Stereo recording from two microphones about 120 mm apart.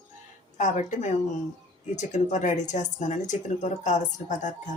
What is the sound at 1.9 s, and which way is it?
Speech, 80° left.